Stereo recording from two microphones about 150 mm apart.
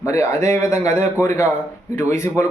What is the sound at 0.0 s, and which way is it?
Speech, 20° left (ahead or behind).